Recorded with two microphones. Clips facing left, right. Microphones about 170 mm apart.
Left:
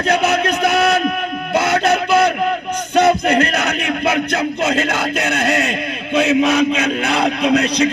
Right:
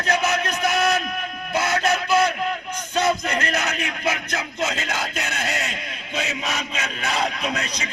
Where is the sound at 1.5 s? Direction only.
65° left (ahead or behind).